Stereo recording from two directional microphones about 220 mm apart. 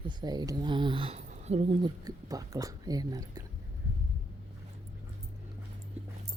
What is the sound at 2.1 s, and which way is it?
Speech, 15° right (ahead or behind).